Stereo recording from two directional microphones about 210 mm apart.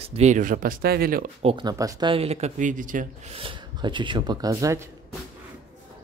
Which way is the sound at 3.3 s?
25° right (ahead or behind).